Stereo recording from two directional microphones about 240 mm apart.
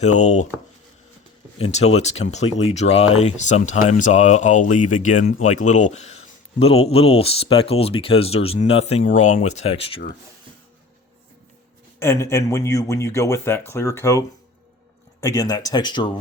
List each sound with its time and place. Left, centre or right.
0.2 s speech: left
1.5 s speech: left
11.9 s speech: centre